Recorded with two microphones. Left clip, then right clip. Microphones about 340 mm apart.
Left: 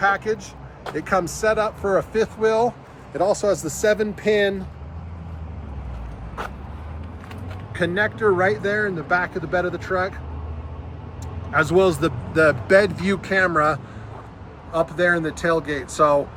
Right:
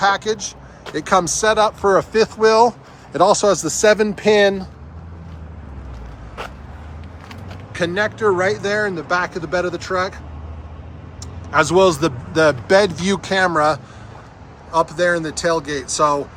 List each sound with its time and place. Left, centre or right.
0.0 s speech: right
7.7 s speech: centre
11.5 s speech: centre